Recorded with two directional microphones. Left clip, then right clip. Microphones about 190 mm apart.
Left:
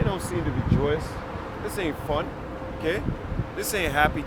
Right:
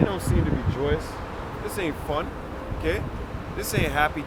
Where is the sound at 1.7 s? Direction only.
10° left (ahead or behind).